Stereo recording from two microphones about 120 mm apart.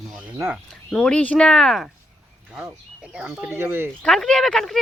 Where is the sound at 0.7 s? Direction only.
5° left (ahead or behind); by 3.9 s 20° right (ahead or behind).